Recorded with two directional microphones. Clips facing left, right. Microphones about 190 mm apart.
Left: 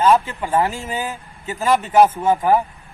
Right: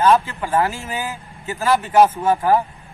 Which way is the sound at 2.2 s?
15° left (ahead or behind).